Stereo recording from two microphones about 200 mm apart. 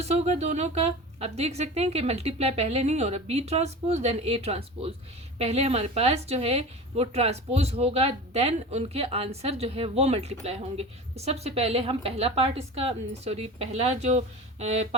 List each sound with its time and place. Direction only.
0.0 s a woman's voice: 35° right (ahead or behind)